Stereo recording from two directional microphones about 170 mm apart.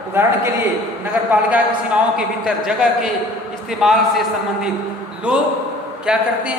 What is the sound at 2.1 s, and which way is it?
A man's voice, centre (ahead or behind).